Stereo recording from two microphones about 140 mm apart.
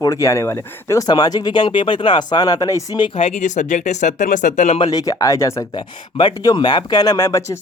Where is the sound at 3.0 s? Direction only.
45° left (ahead or behind).